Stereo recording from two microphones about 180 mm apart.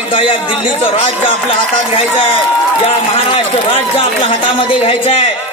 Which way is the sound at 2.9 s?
35° left (ahead or behind).